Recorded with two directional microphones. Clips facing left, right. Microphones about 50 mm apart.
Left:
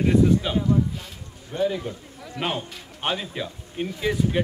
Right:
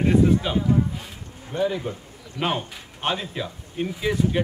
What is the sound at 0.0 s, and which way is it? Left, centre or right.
Speech, centre.